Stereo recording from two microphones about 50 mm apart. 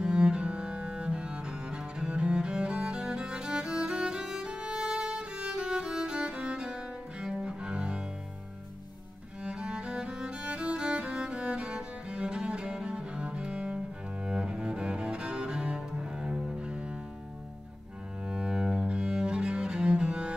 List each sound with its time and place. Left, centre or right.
0.0 s cello: centre
9.4 s music: right
14.2 s cello: centre
18.2 s cello: centre